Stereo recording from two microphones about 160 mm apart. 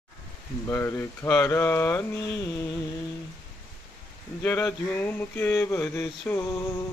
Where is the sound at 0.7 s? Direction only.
15° left (ahead or behind).